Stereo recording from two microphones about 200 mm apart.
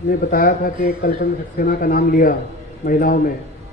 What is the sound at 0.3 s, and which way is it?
Speech, 45° left (ahead or behind).